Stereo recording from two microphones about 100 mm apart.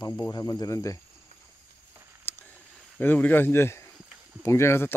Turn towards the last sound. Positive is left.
turn(degrees=25)  # may be behind; listen again after turning